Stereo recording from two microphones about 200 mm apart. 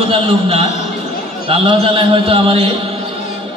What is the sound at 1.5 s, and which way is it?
A man's voice, 25° right (ahead or behind).